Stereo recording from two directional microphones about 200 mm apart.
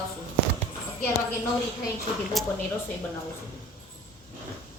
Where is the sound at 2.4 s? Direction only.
Centre (ahead or behind).